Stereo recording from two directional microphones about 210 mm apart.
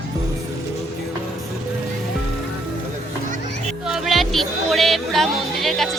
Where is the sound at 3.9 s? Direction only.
Centre (ahead or behind).